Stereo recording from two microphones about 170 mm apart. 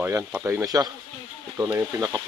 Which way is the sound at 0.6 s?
20° right (ahead or behind).